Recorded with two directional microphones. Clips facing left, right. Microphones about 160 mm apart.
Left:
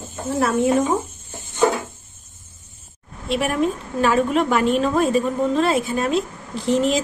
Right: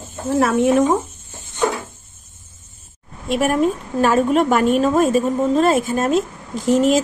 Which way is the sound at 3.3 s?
45° right (ahead or behind).